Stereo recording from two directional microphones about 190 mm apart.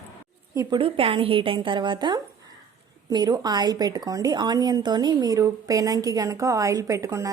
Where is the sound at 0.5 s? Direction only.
15° right (ahead or behind).